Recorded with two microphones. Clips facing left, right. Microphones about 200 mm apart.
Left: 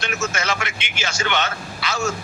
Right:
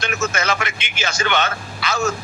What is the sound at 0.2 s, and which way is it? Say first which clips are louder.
A man's voice: right 4 dB; 55° right (ahead or behind).